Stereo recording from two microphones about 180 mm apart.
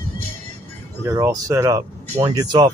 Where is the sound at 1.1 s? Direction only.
20° right (ahead or behind).